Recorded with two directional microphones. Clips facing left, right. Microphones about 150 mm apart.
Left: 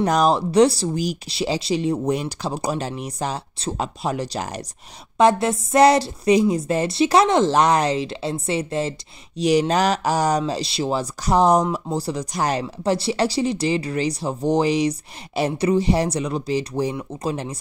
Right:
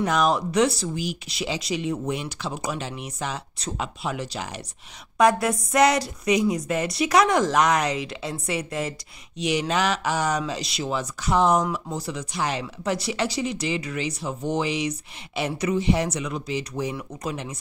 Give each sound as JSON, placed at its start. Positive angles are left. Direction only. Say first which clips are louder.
{"t": 0.0, "sound": "speech", "louder": "left 4 dB", "side_deg": 35}
{"t": 5.1, "sound": "speech", "louder": "left 3 dB", "side_deg": 25}